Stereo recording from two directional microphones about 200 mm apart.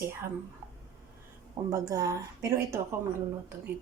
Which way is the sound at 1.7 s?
15° right (ahead or behind).